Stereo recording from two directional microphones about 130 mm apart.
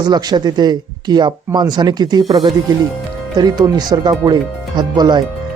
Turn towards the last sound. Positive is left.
turn(degrees=-35)  # may be behind; listen again after turning